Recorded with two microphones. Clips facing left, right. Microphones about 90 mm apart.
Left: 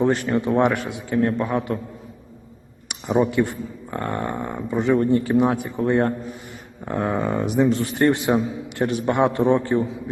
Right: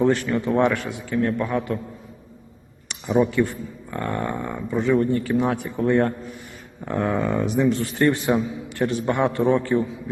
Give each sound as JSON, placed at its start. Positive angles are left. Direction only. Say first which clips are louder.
{"t": 0.3, "sound": "speech", "louder": "left 1 dB", "side_deg": 20}
{"t": 1.1, "sound": "a man's voice", "louder": "left 2 dB", "side_deg": 35}
{"t": 1.4, "sound": "speech", "louder": "left 1 dB", "side_deg": 20}
{"t": 2.9, "sound": "speech", "louder": "even", "side_deg": 20}
{"t": 8.3, "sound": "a man's voice", "louder": "left 1 dB", "side_deg": 45}
{"t": 8.7, "sound": "speech", "louder": "left 1 dB", "side_deg": 20}